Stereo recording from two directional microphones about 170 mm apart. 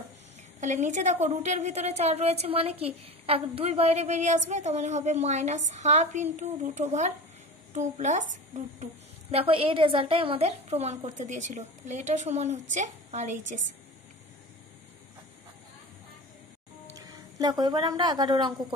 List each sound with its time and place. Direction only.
0.6 s a woman's voice: 45° right (ahead or behind)
9.3 s a woman's voice: 35° right (ahead or behind)
16.9 s speech: 20° right (ahead or behind)